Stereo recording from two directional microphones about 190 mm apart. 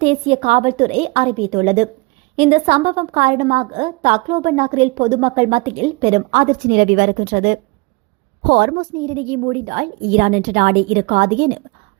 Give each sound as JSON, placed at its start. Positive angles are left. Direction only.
{"t": 0.0, "sound": "a woman's voice", "side_deg": -30}